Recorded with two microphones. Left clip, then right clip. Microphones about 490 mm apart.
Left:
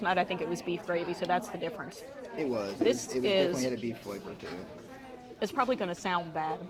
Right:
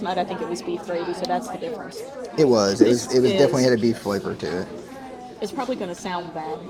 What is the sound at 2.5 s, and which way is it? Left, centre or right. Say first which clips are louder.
Speech: right 10 dB; right.